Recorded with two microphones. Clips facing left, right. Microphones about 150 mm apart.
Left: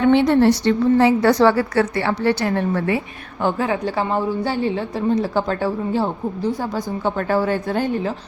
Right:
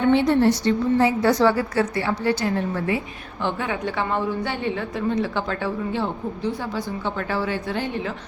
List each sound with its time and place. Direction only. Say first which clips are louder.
0.1 s a woman's voice: left 3 dB; 75° left (ahead or behind)
3.4 s a woman's voice: left 5 dB; 35° left (ahead or behind)